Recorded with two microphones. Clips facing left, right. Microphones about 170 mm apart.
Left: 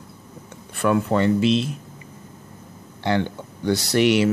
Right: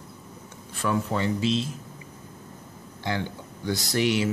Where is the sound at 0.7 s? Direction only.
60° left (ahead or behind).